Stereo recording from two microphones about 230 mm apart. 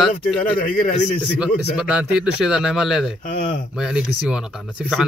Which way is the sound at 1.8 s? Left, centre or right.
Centre.